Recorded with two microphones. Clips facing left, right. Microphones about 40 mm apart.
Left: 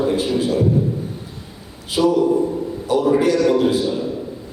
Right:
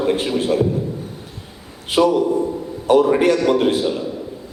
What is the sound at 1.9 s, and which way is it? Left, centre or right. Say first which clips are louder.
A man's voice: even; right.